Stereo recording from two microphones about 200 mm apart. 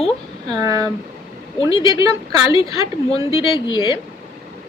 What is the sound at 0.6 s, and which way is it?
Speech, 20° right (ahead or behind).